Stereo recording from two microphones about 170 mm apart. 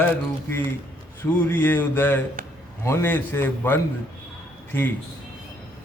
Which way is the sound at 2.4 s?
55° right (ahead or behind).